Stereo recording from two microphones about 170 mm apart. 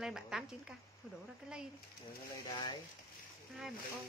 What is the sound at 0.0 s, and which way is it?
Speech, 5° right (ahead or behind).